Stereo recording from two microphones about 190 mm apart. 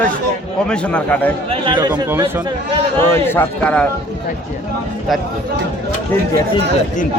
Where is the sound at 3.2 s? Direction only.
10° left (ahead or behind).